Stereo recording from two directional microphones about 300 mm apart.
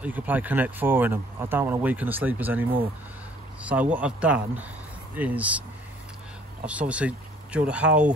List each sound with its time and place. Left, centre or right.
0.0 s speech: centre
3.6 s speech: centre
6.6 s speech: centre